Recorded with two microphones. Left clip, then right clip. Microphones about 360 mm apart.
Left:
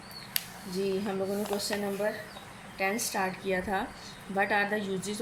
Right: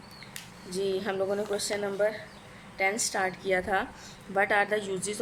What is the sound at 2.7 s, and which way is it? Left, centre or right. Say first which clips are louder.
A woman's voice: right 2 dB; centre.